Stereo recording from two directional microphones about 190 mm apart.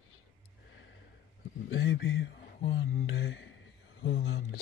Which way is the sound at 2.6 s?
55° left (ahead or behind).